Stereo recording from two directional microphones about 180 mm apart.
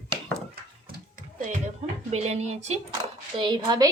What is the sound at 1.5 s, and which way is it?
Speech, 40° right (ahead or behind).